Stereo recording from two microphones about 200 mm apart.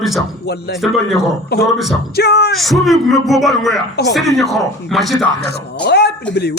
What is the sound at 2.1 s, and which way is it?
Speech, 55° left (ahead or behind).